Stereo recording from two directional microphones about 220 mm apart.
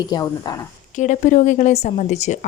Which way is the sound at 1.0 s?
35° left (ahead or behind).